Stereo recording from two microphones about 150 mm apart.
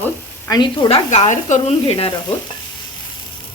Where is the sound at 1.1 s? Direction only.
50° left (ahead or behind).